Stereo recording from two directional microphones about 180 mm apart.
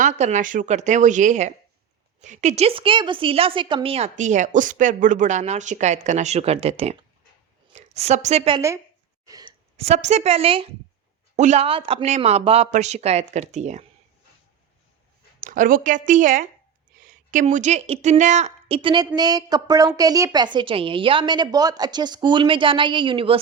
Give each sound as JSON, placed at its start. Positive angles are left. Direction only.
{"t": 0.0, "sound": "a woman's voice", "side_deg": -40}
{"t": 15.4, "sound": "a woman's voice", "side_deg": -50}